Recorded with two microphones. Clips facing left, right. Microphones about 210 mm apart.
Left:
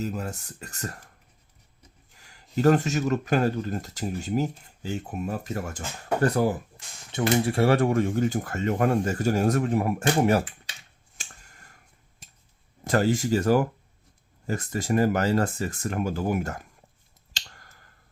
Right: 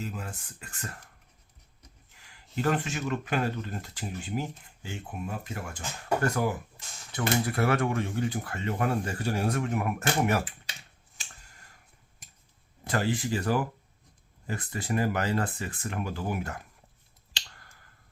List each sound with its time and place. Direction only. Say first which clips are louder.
0.0 s speech: left 7 dB; 40° left (ahead or behind)
2.1 s speech: left 6 dB; 40° left (ahead or behind)
12.8 s speech: left 6 dB; 45° left (ahead or behind)
17.3 s finger snapping: left 1 dB; 45° left (ahead or behind)